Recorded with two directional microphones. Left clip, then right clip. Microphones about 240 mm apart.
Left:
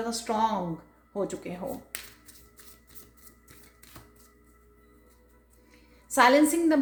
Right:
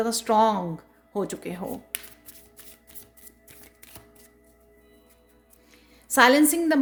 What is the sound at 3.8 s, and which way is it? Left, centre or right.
Music, right.